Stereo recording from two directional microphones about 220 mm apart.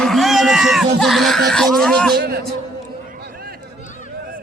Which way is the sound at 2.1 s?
45° right (ahead or behind).